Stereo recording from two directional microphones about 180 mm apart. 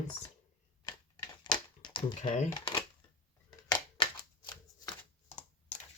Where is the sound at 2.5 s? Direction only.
30° left (ahead or behind).